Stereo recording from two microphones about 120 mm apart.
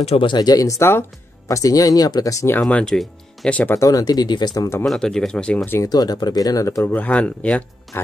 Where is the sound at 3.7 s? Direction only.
30° left (ahead or behind).